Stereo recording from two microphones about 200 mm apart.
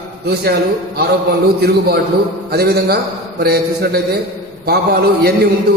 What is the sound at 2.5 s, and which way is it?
A man's voice, 50° right (ahead or behind).